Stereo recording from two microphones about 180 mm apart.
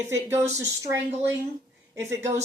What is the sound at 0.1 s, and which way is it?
A woman's voice, 15° right (ahead or behind).